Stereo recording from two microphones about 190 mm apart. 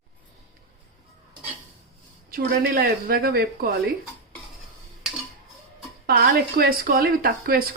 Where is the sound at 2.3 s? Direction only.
55° right (ahead or behind).